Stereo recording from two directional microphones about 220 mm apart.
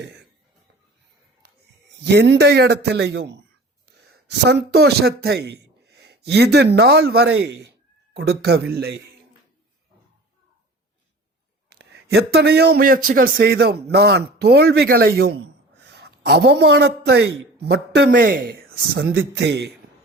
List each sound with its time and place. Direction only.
1.4 s a sound: 50° right (ahead or behind)
2.0 s a man's voice: 50° right (ahead or behind)
11.7 s a man's voice: 50° right (ahead or behind)